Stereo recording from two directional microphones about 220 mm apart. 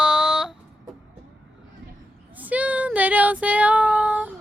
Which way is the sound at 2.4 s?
5° right (ahead or behind).